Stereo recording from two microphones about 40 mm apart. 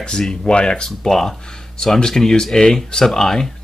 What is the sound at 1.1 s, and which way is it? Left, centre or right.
Speech, centre.